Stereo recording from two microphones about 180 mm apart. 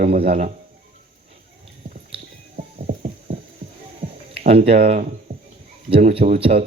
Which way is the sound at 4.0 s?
35° right (ahead or behind).